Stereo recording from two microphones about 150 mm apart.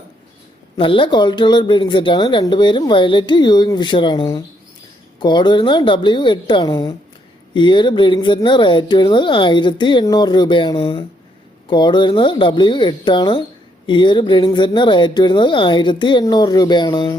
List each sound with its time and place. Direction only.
0.8 s speech: 35° left (ahead or behind)